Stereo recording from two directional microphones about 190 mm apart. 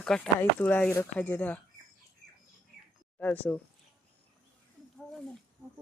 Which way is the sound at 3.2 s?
10° left (ahead or behind).